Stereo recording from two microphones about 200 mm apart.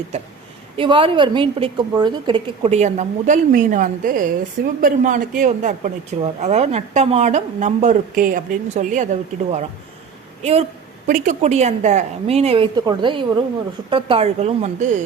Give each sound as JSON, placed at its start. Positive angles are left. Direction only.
{"t": 0.8, "sound": "a woman's voice", "side_deg": -25}
{"t": 10.4, "sound": "speech", "side_deg": -30}